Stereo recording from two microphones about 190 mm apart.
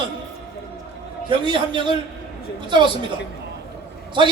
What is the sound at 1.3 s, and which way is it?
Speech, 25° right (ahead or behind).